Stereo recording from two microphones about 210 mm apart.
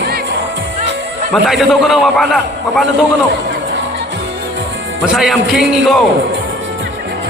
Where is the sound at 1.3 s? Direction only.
Centre (ahead or behind).